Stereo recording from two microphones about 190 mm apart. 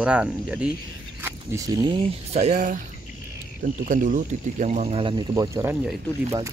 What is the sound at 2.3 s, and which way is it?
Speech, 35° right (ahead or behind).